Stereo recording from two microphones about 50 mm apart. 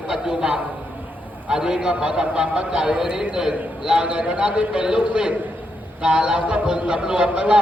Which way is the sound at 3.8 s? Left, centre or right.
Centre.